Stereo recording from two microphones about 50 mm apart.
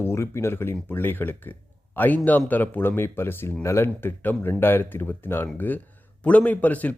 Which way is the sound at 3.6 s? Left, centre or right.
Left.